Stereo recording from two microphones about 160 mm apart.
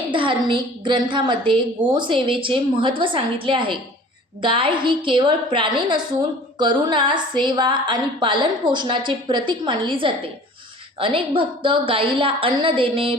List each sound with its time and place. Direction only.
0.1 s a woman's voice: 30° right (ahead or behind)